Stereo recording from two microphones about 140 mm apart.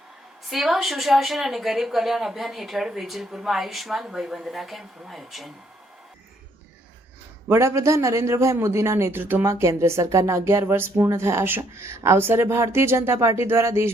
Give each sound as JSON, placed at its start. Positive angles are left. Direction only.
{"t": 0.5, "sound": "speech", "side_deg": 0}
{"t": 7.4, "sound": "a man's voice", "side_deg": -20}